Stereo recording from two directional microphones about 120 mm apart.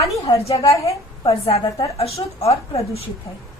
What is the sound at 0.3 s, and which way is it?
A woman's voice, 55° left (ahead or behind).